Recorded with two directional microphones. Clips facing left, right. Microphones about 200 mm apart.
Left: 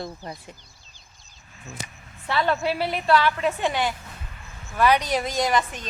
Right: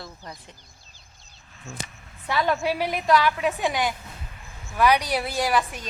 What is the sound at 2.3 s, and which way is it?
Speech, 10° right (ahead or behind).